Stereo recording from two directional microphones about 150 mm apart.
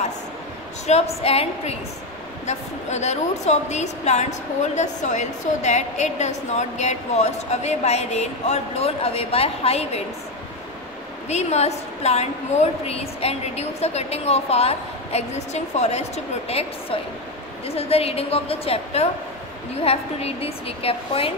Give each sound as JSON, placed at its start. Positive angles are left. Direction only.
{"t": 0.8, "sound": "a woman's voice", "side_deg": 45}
{"t": 11.2, "sound": "a woman's voice", "side_deg": 45}